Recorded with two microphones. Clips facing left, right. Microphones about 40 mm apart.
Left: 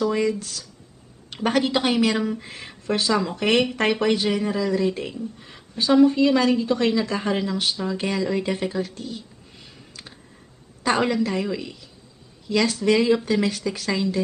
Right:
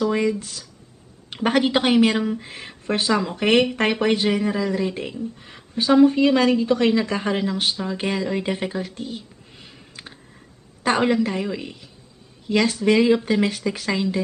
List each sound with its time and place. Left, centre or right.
0.1 s speech: right
2.1 s speech: centre
3.1 s speech: centre
5.7 s a woman's voice: right
8.1 s a sound: right
10.8 s a woman's voice: right
11.3 s speech: centre
11.6 s speech: right